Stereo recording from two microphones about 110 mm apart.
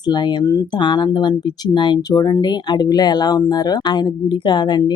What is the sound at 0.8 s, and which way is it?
Speech, 45° left (ahead or behind).